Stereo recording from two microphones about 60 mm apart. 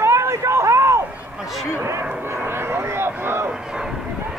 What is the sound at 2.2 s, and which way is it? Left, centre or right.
Aircraft, right.